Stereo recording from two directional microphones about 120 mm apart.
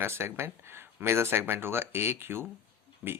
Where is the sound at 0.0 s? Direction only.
20° right (ahead or behind).